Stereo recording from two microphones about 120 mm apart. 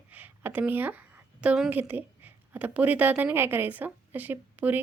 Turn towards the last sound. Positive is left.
turn(degrees=-15)  # may be behind; listen again after turning